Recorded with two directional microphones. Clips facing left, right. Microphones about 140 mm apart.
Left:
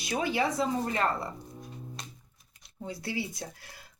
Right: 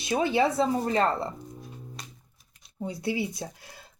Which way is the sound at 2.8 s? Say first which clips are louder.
Right 5 dB; 20° right (ahead or behind).